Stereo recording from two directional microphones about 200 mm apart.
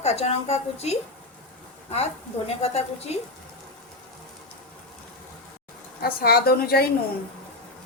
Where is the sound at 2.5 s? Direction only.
30° left (ahead or behind).